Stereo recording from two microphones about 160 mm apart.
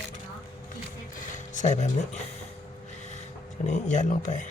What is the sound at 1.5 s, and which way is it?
Speech, 45° left (ahead or behind).